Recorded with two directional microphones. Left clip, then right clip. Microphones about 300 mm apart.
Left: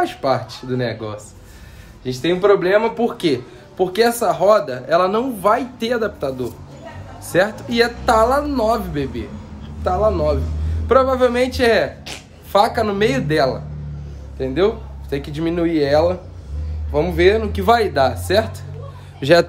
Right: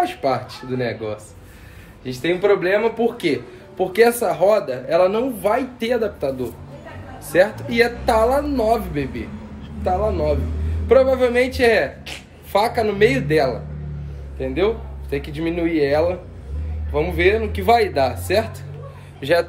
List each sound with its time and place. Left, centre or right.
0.0 s speech: centre
19.1 s speech: left